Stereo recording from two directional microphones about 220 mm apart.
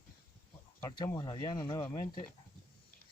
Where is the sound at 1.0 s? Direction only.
20° left (ahead or behind).